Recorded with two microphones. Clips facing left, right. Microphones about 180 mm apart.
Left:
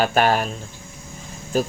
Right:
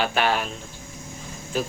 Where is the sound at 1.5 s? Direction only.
40° left (ahead or behind).